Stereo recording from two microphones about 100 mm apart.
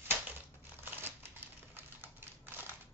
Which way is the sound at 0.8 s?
20° right (ahead or behind).